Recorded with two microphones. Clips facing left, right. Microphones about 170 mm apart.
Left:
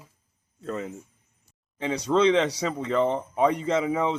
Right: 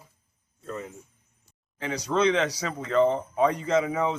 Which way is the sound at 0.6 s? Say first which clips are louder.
Left 4 dB; 90° left.